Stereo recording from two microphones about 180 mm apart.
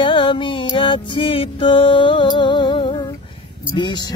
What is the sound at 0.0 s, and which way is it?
Music, 30° left (ahead or behind).